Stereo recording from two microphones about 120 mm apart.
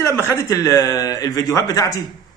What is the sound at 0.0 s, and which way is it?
A man's voice, 25° left (ahead or behind).